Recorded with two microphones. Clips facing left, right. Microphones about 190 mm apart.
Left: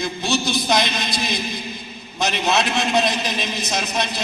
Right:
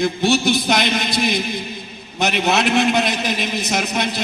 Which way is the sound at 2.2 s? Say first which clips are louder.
Right 2 dB; 60° right (ahead or behind).